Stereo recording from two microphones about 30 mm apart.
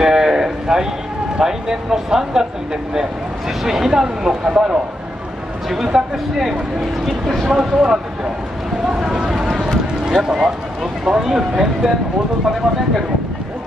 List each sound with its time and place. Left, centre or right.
0.0 s a sound: centre
1.4 s speech: right
5.8 s speech: centre
7.1 s speech: centre
7.4 s speech: centre
10.0 s speech: right